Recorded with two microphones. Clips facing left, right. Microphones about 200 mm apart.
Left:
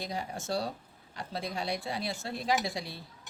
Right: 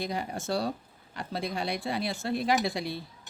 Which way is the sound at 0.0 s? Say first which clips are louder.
Right 4 dB; 60° right (ahead or behind).